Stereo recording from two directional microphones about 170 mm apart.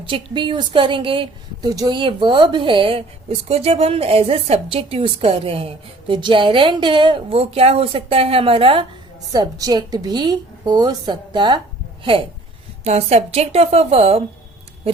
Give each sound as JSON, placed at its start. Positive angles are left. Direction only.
{"t": 0.0, "sound": "a woman's voice", "side_deg": -30}
{"t": 9.3, "sound": "a woman's voice", "side_deg": -20}
{"t": 12.8, "sound": "a woman's voice", "side_deg": -40}